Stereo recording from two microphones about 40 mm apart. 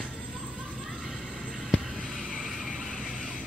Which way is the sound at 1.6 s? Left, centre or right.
Centre.